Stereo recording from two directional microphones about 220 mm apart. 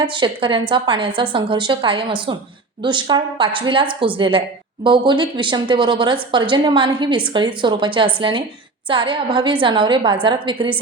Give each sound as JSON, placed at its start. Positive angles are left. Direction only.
{"t": 0.0, "sound": "a woman's voice", "side_deg": -20}